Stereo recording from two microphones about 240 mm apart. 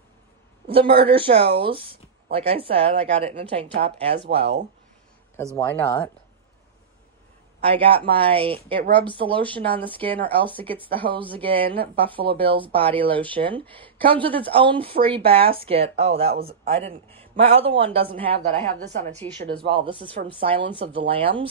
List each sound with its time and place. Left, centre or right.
0.7 s speech: right
5.6 s speech: centre
7.6 s speech: right
9.3 s speech: centre
10.9 s speech: right
12.6 s speech: centre
13.3 s speech: right
13.8 s a sound: right
14.2 s speech: right